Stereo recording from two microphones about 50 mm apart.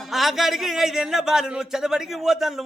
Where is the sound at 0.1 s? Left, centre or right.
Centre.